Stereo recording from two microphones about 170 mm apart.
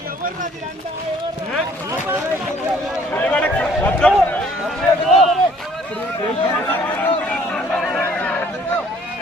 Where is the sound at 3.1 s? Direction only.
10° left (ahead or behind).